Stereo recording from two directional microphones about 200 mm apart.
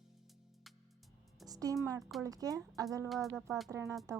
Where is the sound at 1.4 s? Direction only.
20° right (ahead or behind).